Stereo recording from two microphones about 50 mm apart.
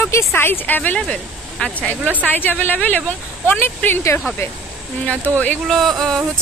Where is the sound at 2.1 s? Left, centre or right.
Left.